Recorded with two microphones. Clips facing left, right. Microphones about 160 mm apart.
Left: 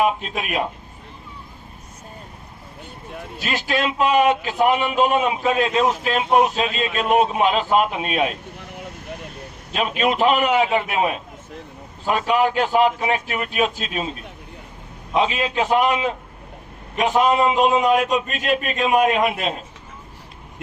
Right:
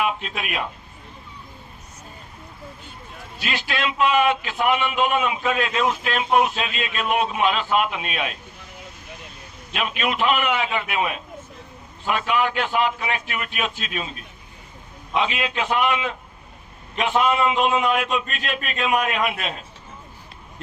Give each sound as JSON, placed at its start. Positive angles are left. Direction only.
{"t": 0.0, "sound": "a man's voice", "side_deg": 35}
{"t": 3.3, "sound": "a man's voice", "side_deg": 45}
{"t": 8.5, "sound": "vehicle", "side_deg": 60}
{"t": 9.7, "sound": "a man's voice", "side_deg": 35}
{"t": 15.1, "sound": "a man's voice", "side_deg": 35}